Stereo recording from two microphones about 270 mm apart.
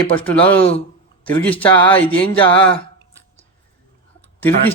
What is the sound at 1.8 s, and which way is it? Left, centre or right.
Mantra, centre.